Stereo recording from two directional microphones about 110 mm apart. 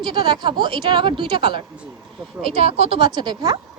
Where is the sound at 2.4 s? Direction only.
70° right (ahead or behind).